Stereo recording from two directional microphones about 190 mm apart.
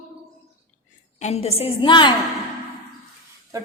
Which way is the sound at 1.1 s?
35° left (ahead or behind).